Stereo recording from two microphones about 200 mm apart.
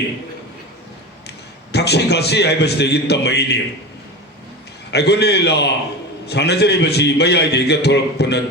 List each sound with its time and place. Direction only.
1.7 s a man's voice: 55° left (ahead or behind)
4.9 s a man's voice: 55° left (ahead or behind)